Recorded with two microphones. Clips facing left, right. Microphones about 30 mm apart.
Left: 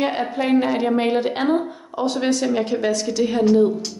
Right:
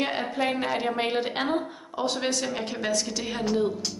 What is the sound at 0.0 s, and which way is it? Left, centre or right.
A woman's voice, centre.